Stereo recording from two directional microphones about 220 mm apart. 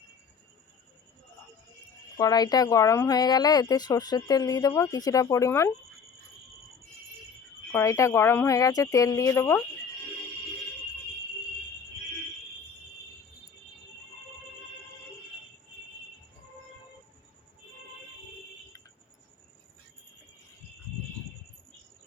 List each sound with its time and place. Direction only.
2.1 s speech: 15° left (ahead or behind)
7.7 s speech: 15° left (ahead or behind)